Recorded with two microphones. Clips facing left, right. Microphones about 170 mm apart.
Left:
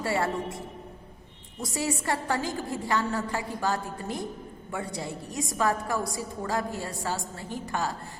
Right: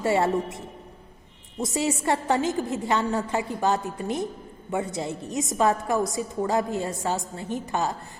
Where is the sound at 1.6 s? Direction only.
20° right (ahead or behind).